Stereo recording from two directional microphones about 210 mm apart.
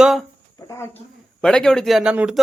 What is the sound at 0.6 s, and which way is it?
Speech, 15° left (ahead or behind).